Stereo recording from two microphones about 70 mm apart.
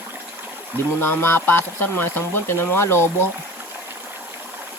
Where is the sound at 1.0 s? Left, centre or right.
Left.